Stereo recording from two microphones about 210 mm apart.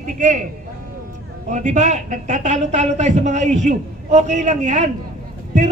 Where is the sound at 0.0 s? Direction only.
35° right (ahead or behind).